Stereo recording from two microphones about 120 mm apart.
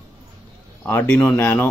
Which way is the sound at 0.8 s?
15° left (ahead or behind).